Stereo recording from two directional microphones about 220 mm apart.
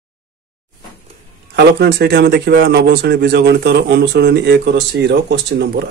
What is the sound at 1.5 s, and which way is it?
Speech, 50° right (ahead or behind).